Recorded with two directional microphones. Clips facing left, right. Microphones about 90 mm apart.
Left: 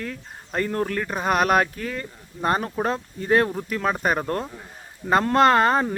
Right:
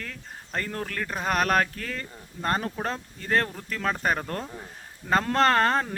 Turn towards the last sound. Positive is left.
turn(degrees=10)  # may be behind; listen again after turning